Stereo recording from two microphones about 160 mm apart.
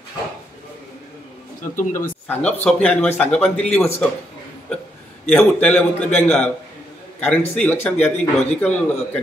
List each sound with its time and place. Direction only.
1.8 s speech: 55° left (ahead or behind)
2.2 s a man's voice: 10° left (ahead or behind)
5.3 s a man's voice: 10° left (ahead or behind)